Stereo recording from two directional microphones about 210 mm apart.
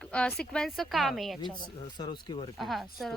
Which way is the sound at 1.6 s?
20° left (ahead or behind).